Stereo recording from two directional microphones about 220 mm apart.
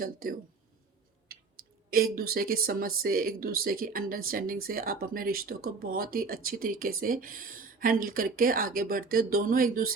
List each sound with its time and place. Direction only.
0.0 s speech: 40° right (ahead or behind)
1.9 s speech: 45° right (ahead or behind)